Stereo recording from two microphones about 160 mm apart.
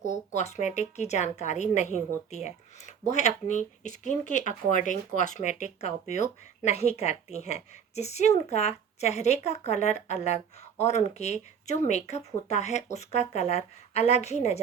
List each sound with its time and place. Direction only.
0.3 s speech: 45° left (ahead or behind)